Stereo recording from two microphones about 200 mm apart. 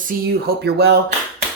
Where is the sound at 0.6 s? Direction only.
55° right (ahead or behind).